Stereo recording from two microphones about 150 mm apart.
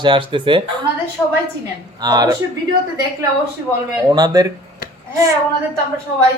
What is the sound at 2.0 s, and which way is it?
Speech, 25° right (ahead or behind).